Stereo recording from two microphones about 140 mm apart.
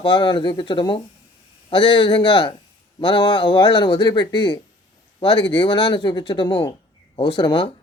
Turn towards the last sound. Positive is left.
turn(degrees=35)  # may be behind; listen again after turning